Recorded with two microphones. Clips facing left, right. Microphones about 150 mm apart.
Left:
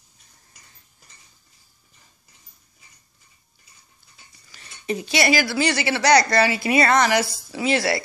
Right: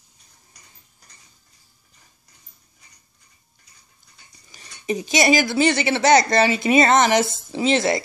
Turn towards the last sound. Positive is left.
turn(degrees=-20)  # may be behind; listen again after turning